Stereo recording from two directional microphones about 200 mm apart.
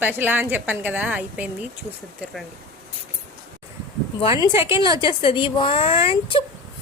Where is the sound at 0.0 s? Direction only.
10° right (ahead or behind).